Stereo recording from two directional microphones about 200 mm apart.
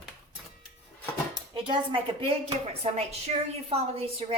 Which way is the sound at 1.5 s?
25° right (ahead or behind).